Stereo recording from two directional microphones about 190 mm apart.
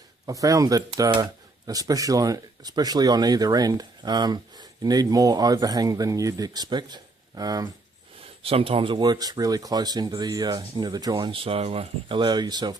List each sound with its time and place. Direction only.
0.3 s speech: 15° right (ahead or behind)
8.4 s speech: 30° right (ahead or behind)